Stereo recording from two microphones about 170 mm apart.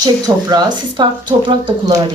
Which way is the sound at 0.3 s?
25° right (ahead or behind).